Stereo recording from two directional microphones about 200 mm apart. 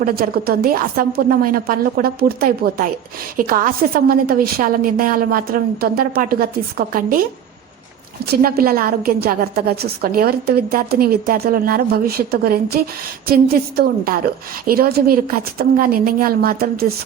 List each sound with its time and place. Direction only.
0.0 s a woman's voice: 50° right (ahead or behind)
8.3 s a woman's voice: 50° right (ahead or behind)